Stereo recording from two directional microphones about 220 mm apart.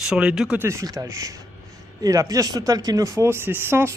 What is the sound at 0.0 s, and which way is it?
Speech, 5° right (ahead or behind).